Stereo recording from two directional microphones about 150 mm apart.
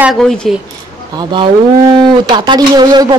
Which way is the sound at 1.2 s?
30° right (ahead or behind).